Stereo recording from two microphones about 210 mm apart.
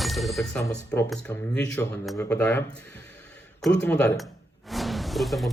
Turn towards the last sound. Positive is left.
turn(degrees=0)  # may be behind; listen again after turning